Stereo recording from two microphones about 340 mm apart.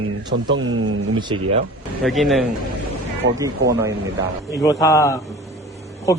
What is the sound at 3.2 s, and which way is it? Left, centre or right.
Speech, right.